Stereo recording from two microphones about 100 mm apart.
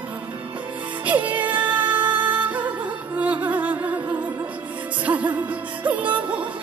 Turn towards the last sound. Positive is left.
turn(degrees=-15)  # may be behind; listen again after turning